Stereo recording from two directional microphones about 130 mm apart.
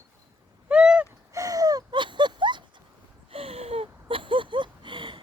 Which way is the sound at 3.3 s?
50° right (ahead or behind).